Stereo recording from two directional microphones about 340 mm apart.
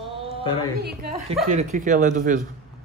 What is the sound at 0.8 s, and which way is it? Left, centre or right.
Speech, right.